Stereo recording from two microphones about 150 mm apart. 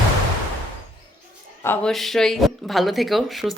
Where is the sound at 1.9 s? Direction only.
Centre (ahead or behind).